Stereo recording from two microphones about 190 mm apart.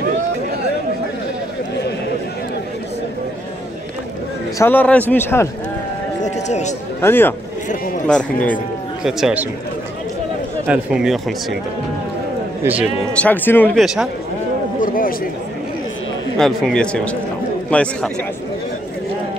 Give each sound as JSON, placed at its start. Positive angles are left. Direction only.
{"t": 4.6, "sound": "a man's voice", "side_deg": 10}
{"t": 6.2, "sound": "a sound", "side_deg": 35}
{"t": 7.0, "sound": "a man's voice", "side_deg": 10}
{"t": 9.0, "sound": "speech", "side_deg": -5}
{"t": 10.7, "sound": "speech", "side_deg": -5}
{"t": 13.1, "sound": "a man's voice", "side_deg": 10}
{"t": 14.8, "sound": "a sound", "side_deg": 45}
{"t": 16.3, "sound": "a man's voice", "side_deg": 0}